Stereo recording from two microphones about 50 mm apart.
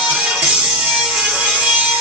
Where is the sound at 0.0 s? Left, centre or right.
Centre.